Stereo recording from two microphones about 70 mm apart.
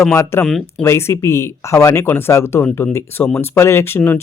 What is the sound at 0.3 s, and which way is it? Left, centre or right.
Speech, left.